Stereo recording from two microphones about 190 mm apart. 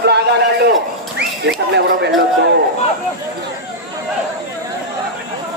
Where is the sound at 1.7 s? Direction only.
65° right (ahead or behind).